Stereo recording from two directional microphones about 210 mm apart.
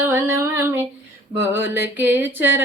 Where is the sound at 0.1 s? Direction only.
10° right (ahead or behind).